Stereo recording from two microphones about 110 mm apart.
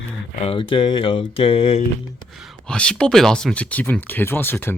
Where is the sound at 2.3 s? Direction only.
Centre (ahead or behind).